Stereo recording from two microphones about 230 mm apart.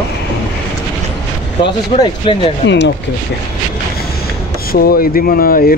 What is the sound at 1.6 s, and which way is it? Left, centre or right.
Speech, left.